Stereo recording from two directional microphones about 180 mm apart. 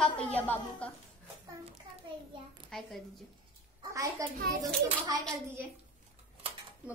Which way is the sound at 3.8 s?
20° right (ahead or behind).